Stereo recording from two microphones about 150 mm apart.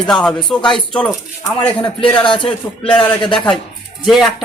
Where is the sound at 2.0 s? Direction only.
30° left (ahead or behind).